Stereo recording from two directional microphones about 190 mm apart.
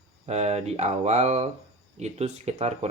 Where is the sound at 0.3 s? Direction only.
35° right (ahead or behind).